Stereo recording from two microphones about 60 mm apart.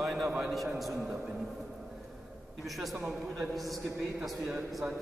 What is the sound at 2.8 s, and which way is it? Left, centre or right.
A man's voice, centre.